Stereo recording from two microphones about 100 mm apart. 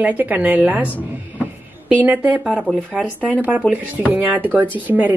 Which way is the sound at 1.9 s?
15° right (ahead or behind).